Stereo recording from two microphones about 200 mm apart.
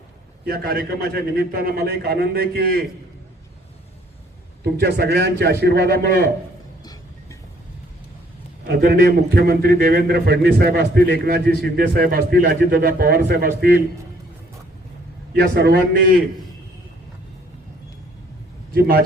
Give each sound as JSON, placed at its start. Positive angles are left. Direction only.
{"t": 0.4, "sound": "a man's voice", "side_deg": -50}
{"t": 4.6, "sound": "a man's voice", "side_deg": -55}
{"t": 6.8, "sound": "music", "side_deg": 20}
{"t": 8.6, "sound": "a man's voice", "side_deg": -50}
{"t": 15.3, "sound": "a man's voice", "side_deg": -50}
{"t": 18.7, "sound": "a man's voice", "side_deg": -50}